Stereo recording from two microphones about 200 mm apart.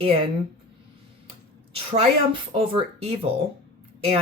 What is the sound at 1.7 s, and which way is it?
A woman's voice, 30° right (ahead or behind).